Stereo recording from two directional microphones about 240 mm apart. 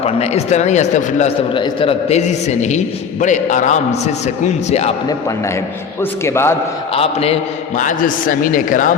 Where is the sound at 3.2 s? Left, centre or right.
Left.